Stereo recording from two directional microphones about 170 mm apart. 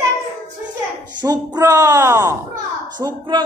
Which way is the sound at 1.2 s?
25° right (ahead or behind).